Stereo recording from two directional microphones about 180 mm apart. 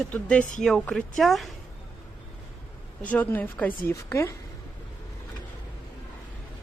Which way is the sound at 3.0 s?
10° left (ahead or behind).